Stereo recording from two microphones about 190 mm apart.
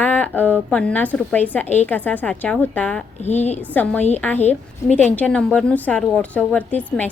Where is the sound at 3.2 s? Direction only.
35° left (ahead or behind).